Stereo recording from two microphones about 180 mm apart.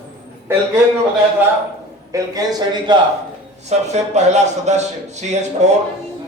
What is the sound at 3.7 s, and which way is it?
Speech, 40° right (ahead or behind).